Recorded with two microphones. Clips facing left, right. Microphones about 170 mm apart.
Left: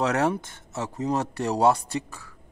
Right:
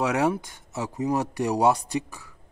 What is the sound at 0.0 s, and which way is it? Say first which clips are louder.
Speech: even; 10° right (ahead or behind).